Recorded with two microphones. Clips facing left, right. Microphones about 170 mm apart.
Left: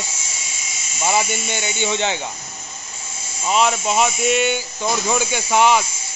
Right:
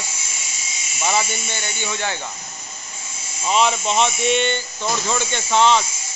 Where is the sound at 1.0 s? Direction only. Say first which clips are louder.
Left 2 dB; 15° left (ahead or behind).